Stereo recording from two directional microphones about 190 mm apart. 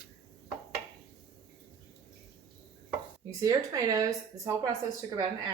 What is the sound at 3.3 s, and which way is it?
Speech, 20° right (ahead or behind).